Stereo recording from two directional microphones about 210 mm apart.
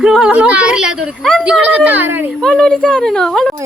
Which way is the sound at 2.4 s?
5° left (ahead or behind).